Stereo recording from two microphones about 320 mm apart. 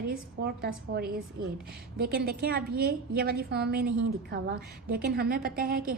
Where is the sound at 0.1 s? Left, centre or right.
Right.